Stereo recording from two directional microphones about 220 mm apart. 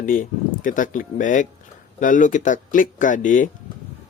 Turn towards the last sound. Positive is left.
turn(degrees=35)  # may be behind; listen again after turning